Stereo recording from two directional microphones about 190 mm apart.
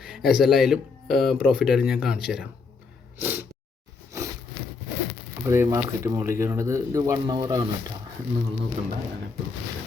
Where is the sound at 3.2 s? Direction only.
10° right (ahead or behind).